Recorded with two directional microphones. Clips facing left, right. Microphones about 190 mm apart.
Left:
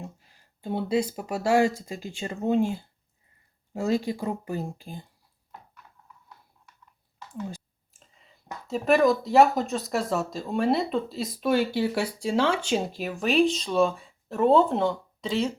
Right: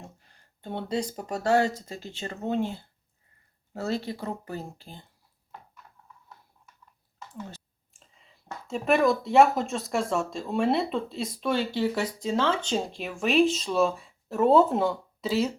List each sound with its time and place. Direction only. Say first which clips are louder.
0.6 s speech: left 4 dB; 10° left (ahead or behind)
7.5 s clicking: left 7 dB; 5° left (ahead or behind)
8.6 s speech: left 2 dB; centre (ahead or behind)